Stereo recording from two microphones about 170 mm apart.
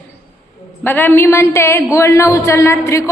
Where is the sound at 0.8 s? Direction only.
10° left (ahead or behind).